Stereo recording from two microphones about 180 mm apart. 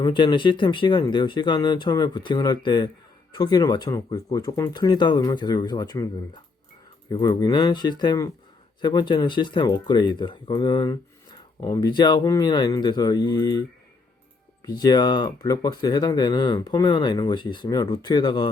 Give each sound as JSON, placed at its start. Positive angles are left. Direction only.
{"t": 0.0, "sound": "speech", "side_deg": 25}
{"t": 14.7, "sound": "speech", "side_deg": 20}